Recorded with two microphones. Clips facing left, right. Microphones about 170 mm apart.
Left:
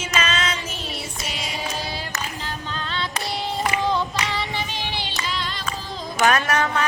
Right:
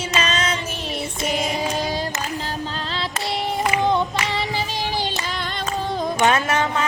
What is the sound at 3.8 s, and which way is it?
Singing, 20° right (ahead or behind).